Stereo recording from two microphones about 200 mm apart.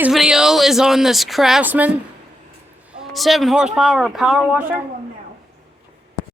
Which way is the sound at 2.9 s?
Centre (ahead or behind).